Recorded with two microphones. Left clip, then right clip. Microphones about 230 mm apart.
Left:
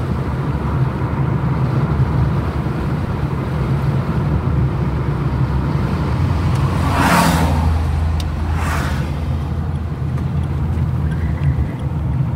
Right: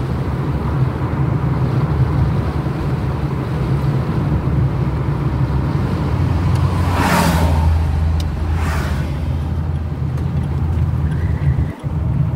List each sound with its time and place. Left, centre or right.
7.0 s vehicle: left